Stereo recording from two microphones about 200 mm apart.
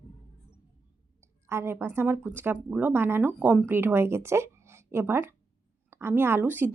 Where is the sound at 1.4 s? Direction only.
15° right (ahead or behind).